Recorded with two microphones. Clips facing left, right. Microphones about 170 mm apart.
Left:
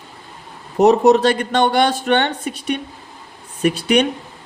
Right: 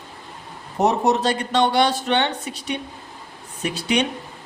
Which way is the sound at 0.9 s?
65° left (ahead or behind).